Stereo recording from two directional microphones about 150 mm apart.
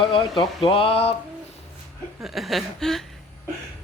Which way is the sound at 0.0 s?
35° left (ahead or behind).